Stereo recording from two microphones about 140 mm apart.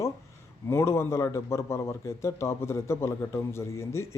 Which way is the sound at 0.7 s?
20° left (ahead or behind).